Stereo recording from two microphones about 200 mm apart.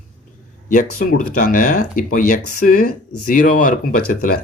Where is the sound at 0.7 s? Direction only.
40° left (ahead or behind).